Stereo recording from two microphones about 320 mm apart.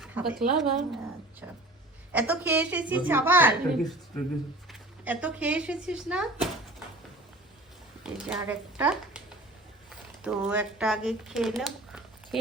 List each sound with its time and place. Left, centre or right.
0.0 s a woman's voice: centre
2.1 s a woman's voice: centre
8.0 s a woman's voice: centre
10.2 s speech: centre